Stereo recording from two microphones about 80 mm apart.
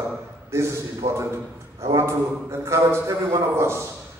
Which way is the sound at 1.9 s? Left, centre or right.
Right.